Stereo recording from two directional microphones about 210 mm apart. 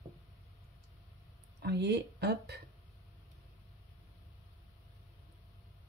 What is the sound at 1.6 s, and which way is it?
Speech, 50° right (ahead or behind).